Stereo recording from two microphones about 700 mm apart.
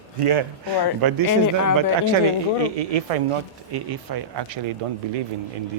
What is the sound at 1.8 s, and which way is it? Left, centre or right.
Speech, right.